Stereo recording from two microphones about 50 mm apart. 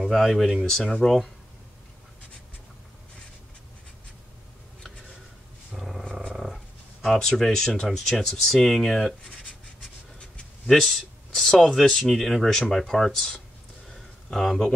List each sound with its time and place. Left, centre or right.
0.1 s speech: centre
5.7 s dog: centre
6.3 s roaring cats: centre
7.2 s speech: centre
9.3 s writing: left
10.7 s speech: centre
13.8 s a sound: centre